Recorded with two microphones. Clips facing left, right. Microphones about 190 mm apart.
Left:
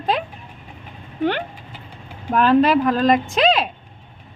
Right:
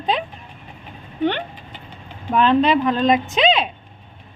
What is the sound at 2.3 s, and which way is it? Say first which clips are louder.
Speech: left 1 dB; 5° left (ahead or behind).